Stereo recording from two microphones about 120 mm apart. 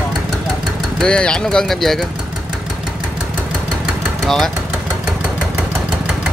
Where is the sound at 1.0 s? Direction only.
5° left (ahead or behind).